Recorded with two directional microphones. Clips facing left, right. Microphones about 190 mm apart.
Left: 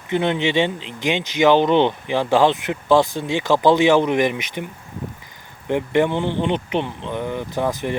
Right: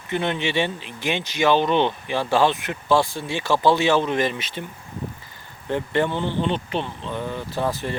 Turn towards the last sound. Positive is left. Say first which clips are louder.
# left 3 dB
turn(degrees=15)  # may be behind; listen again after turning